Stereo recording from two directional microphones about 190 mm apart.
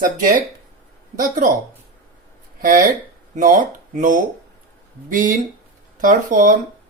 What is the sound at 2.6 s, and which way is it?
Speech, 45° right (ahead or behind).